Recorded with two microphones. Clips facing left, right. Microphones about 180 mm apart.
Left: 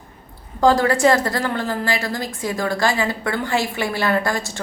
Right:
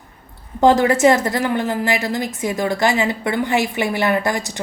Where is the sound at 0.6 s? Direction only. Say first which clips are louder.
Right 2 dB; 20° right (ahead or behind).